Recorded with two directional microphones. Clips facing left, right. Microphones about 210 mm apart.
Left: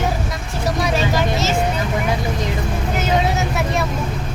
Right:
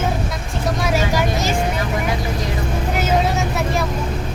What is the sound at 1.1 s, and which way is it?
Vehicle, 15° right (ahead or behind).